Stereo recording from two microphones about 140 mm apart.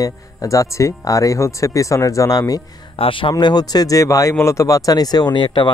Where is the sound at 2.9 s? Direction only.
40° left (ahead or behind).